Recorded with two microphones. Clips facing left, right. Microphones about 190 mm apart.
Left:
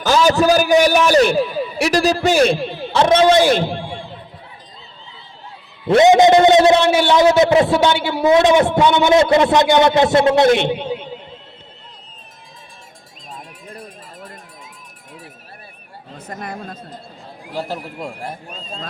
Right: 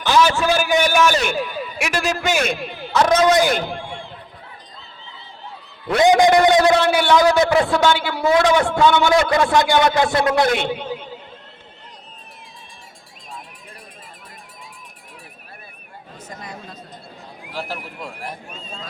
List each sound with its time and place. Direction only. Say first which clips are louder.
0.0 s a man's voice: left 3 dB; 40° left (ahead or behind)
5.9 s a man's voice: left 4 dB; 25° left (ahead or behind)
16.1 s speech: left 6 dB; 60° left (ahead or behind)
17.5 s a man's voice: left 4 dB; 20° left (ahead or behind)